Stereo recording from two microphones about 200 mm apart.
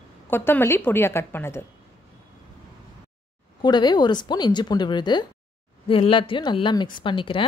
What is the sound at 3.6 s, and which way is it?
A woman's voice, 20° left (ahead or behind).